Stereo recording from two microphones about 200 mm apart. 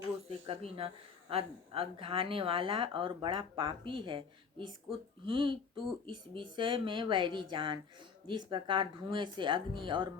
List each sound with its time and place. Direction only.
0.3 s speech: 30° right (ahead or behind)